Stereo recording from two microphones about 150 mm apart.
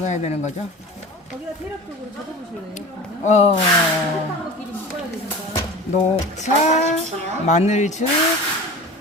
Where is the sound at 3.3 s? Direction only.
45° left (ahead or behind).